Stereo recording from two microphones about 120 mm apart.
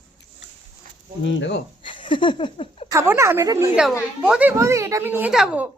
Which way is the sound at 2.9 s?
25° right (ahead or behind).